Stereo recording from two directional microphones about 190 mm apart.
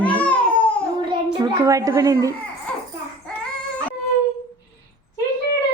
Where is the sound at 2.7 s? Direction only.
5° left (ahead or behind).